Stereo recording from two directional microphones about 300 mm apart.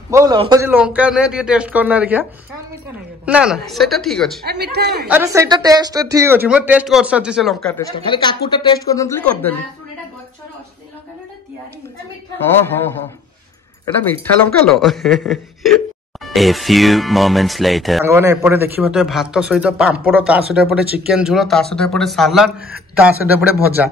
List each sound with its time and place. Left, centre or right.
0.1 s speech: centre
3.3 s speech: centre
4.5 s a man's voice: right
5.0 s a woman's voice: centre
12.4 s speech: centre
14.0 s speech: centre